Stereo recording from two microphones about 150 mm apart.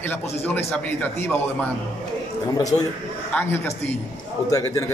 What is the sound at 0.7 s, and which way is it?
Speech, 10° left (ahead or behind).